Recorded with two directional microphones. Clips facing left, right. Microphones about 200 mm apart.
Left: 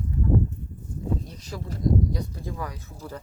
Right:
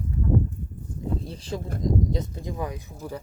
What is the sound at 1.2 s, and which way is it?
Speech, 30° right (ahead or behind).